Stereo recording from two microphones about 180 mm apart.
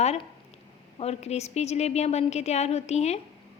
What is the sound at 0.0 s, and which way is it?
A woman's voice, 35° left (ahead or behind).